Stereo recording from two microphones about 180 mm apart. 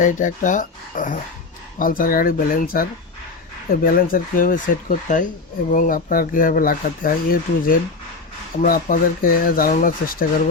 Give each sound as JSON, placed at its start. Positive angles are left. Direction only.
{"t": 0.0, "sound": "speech", "side_deg": 45}
{"t": 3.8, "sound": "speech", "side_deg": 50}